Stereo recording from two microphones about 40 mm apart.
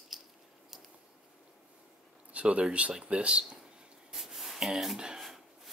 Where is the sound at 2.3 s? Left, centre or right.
Right.